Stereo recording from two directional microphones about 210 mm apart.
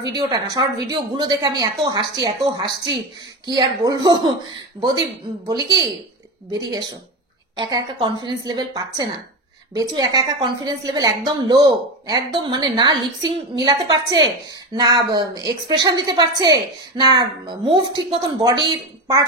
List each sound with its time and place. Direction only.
0.0 s a woman's voice: 20° right (ahead or behind)
7.5 s a woman's voice: 20° right (ahead or behind)